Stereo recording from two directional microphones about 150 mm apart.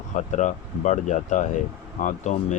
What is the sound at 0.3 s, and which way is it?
Speech, 55° left (ahead or behind).